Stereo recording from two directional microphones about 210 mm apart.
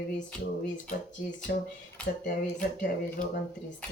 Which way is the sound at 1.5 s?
45° left (ahead or behind).